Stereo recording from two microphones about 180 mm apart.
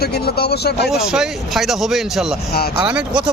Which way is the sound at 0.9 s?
5° right (ahead or behind).